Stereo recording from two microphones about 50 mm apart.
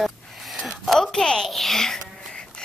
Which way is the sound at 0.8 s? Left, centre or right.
Centre.